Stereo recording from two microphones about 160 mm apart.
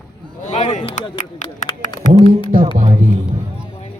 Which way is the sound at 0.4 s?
45° left (ahead or behind).